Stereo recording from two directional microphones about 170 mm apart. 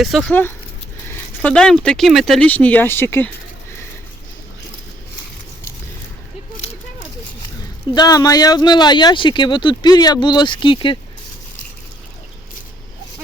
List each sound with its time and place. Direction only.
0.0 s speech: centre (ahead or behind)
7.9 s speech: 20° left (ahead or behind)